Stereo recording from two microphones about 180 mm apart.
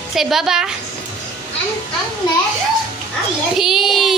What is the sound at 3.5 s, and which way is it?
Speech, centre (ahead or behind).